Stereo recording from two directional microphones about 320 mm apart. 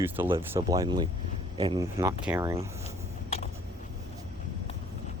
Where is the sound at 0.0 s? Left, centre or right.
Centre.